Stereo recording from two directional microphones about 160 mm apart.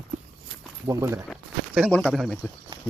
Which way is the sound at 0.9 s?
20° right (ahead or behind).